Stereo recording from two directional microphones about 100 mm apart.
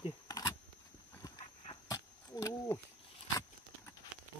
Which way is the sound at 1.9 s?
35° left (ahead or behind).